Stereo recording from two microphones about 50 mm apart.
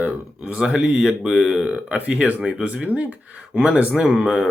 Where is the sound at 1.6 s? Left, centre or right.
Right.